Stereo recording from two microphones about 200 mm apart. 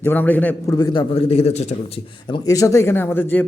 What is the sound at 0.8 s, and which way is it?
Speech, 20° left (ahead or behind).